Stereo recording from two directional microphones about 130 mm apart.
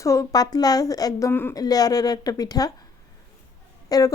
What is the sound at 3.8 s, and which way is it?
Speech, 30° left (ahead or behind).